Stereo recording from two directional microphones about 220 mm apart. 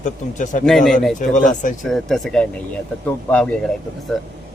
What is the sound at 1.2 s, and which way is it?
Speech, 35° left (ahead or behind).